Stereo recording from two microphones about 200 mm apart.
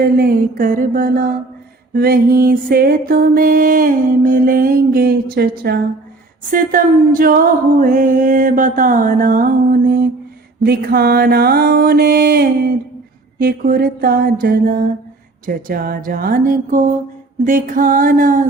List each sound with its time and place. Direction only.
0.0 s music: 45° right (ahead or behind)
6.5 s singing: 45° right (ahead or behind)
10.6 s music: 45° right (ahead or behind)